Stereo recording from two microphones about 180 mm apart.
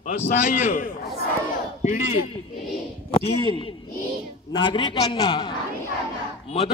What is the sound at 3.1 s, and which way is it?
Speech, 30° left (ahead or behind).